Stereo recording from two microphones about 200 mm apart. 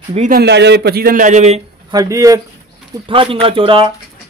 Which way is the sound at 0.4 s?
60° right (ahead or behind).